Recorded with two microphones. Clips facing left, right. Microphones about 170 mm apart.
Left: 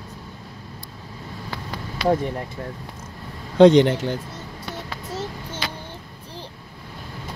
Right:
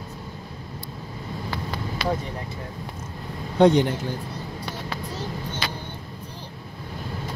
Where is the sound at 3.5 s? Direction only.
90° left.